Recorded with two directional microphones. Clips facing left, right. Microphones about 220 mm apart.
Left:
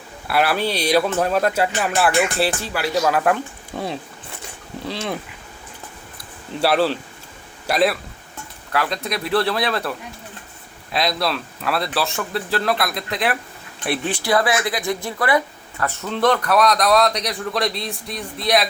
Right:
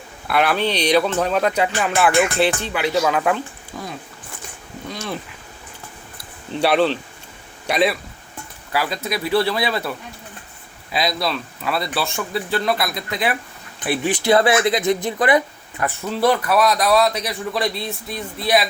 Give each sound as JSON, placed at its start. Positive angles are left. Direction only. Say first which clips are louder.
{"t": 0.3, "sound": "speech", "louder": "right 1 dB", "side_deg": 5}
{"t": 6.6, "sound": "speech", "louder": "right 1 dB", "side_deg": 5}
{"t": 10.9, "sound": "speech", "louder": "even", "side_deg": 0}
{"t": 14.1, "sound": "speech", "louder": "right 5 dB", "side_deg": -25}
{"t": 16.0, "sound": "speech", "louder": "even", "side_deg": -5}